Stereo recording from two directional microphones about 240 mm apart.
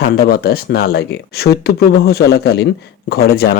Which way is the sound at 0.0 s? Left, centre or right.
Left.